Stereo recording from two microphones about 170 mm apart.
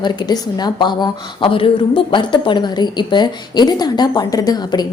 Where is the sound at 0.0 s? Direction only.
25° left (ahead or behind).